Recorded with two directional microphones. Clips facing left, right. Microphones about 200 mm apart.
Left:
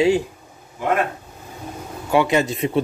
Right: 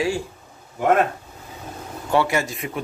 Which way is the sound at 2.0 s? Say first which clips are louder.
Left 3 dB; 15° left (ahead or behind).